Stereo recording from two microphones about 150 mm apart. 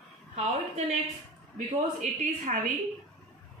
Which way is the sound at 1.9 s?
60° right (ahead or behind).